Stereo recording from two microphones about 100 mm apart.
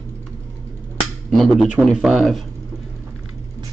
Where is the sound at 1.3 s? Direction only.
Centre (ahead or behind).